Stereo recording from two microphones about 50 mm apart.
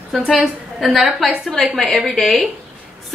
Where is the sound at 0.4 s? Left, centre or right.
Centre.